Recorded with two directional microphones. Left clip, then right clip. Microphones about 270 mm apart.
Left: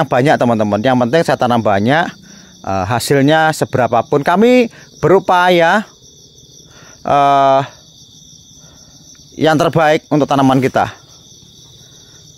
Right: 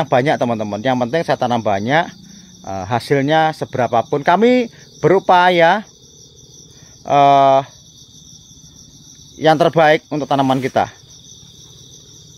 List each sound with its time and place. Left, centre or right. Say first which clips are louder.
0.0 s speech: left 3 dB; left
7.0 s speech: even; left
9.4 s speech: even; left